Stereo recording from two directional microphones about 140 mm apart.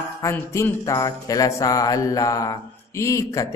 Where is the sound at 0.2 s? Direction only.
20° left (ahead or behind).